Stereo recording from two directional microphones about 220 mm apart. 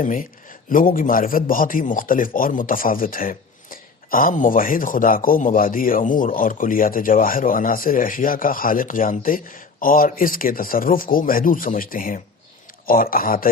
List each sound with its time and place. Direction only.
0.0 s a man's voice: 35° left (ahead or behind)